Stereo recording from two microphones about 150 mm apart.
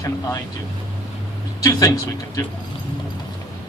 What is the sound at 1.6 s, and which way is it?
Speech, 20° left (ahead or behind).